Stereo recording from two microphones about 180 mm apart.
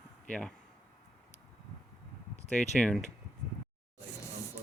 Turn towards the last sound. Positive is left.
turn(degrees=5)  # may be behind; listen again after turning